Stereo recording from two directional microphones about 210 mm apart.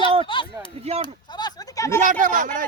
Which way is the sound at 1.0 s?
20° left (ahead or behind).